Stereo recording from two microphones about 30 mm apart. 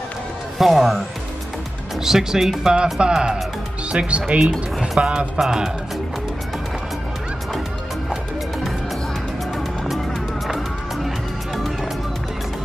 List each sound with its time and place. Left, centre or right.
0.6 s speech: centre
2.0 s speech: centre
3.9 s speech: right
5.4 s speech: centre